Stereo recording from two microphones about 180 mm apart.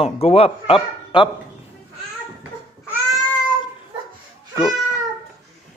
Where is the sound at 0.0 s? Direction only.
35° left (ahead or behind).